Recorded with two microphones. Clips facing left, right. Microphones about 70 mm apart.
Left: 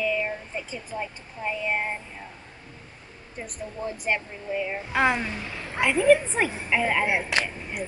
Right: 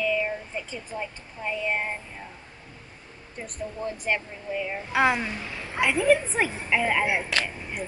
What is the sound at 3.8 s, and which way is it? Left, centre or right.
Speech, centre.